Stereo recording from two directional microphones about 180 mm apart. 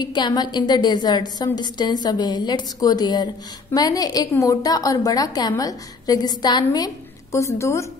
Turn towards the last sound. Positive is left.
turn(degrees=15)  # may be behind; listen again after turning